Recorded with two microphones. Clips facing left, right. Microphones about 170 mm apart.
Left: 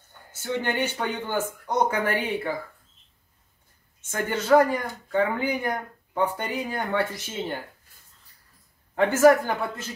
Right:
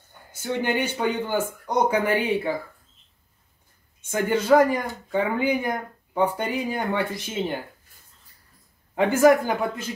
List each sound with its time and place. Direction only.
0.3 s speech: 10° right (ahead or behind)
4.1 s speech: 15° right (ahead or behind)
8.9 s speech: 15° right (ahead or behind)